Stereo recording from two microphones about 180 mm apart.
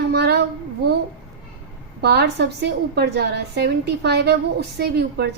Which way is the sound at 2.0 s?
65° right (ahead or behind).